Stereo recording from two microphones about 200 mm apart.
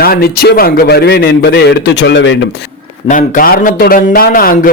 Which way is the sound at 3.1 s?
45° left (ahead or behind).